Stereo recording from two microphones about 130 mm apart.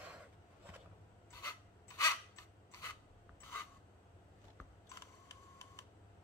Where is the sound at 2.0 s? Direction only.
25° left (ahead or behind).